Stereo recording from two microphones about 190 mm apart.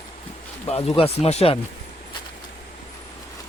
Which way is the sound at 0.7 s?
30° left (ahead or behind).